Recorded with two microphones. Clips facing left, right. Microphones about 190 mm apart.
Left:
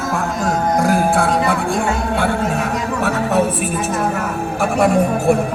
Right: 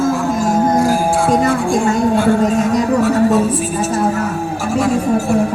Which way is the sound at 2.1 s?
60° left (ahead or behind).